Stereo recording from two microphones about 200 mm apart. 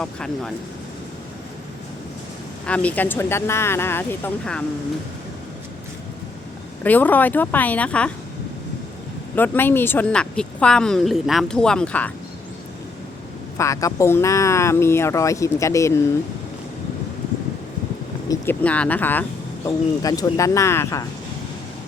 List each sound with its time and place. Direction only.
0.0 s speech: 5° left (ahead or behind)
2.6 s speech: 5° left (ahead or behind)
6.8 s speech: 10° left (ahead or behind)
9.3 s speech: 10° left (ahead or behind)
13.6 s speech: 15° left (ahead or behind)
18.3 s speech: 10° left (ahead or behind)